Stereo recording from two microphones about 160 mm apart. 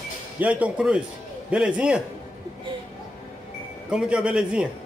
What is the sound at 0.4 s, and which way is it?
A man's voice, 10° right (ahead or behind).